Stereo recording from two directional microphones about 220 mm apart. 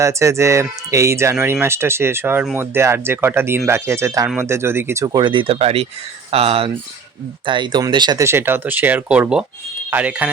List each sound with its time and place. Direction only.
0.0 s speech: 15° right (ahead or behind)